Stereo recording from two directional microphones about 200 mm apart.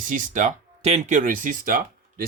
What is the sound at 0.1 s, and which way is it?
Speech, 40° right (ahead or behind).